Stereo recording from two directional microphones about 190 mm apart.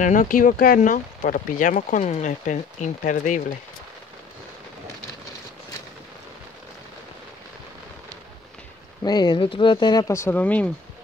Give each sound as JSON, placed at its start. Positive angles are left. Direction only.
{"t": 0.0, "sound": "speech", "side_deg": 45}
{"t": 9.0, "sound": "speech", "side_deg": 20}